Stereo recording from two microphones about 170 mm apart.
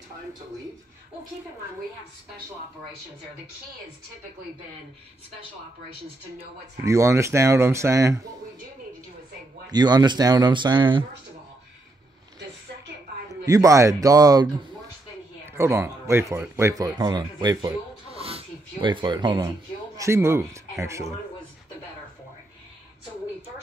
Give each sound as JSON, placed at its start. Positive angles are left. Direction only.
{"t": 6.8, "sound": "speech", "side_deg": -15}
{"t": 9.7, "sound": "speech", "side_deg": -25}
{"t": 13.5, "sound": "speech", "side_deg": -20}
{"t": 18.1, "sound": "a sound", "side_deg": -35}
{"t": 20.0, "sound": "speech", "side_deg": -15}